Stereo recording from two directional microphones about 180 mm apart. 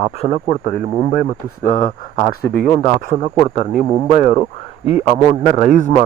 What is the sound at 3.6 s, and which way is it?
Speech, 40° left (ahead or behind).